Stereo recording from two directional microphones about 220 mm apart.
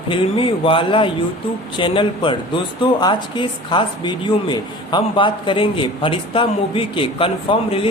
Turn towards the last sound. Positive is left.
turn(degrees=20)  # may be behind; listen again after turning